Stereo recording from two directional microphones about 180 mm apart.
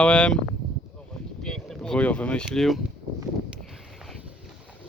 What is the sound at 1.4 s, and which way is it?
Speech, 5° left (ahead or behind).